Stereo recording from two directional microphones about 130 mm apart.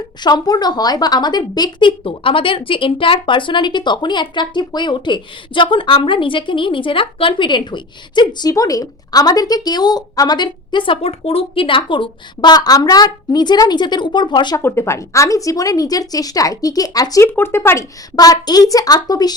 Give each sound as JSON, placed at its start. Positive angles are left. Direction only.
{"t": 0.2, "sound": "a woman's voice", "side_deg": 35}
{"t": 14.6, "sound": "speech", "side_deg": 20}
{"t": 17.2, "sound": "speech", "side_deg": 15}